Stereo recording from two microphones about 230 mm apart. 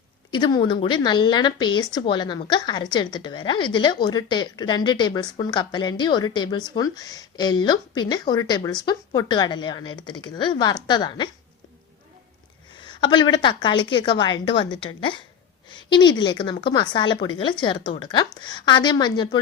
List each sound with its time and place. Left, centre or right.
0.3 s speech: centre
12.7 s speech: centre